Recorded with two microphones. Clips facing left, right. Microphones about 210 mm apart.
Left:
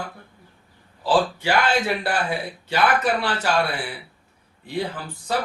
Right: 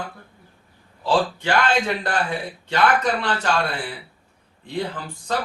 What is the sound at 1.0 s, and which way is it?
Speech, 10° left (ahead or behind).